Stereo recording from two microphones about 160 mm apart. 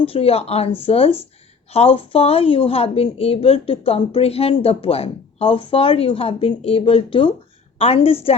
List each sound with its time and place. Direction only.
0.0 s a woman's voice: 35° left (ahead or behind)